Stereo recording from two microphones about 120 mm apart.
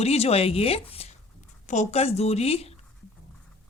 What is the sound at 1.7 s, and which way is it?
Speech, 70° left (ahead or behind).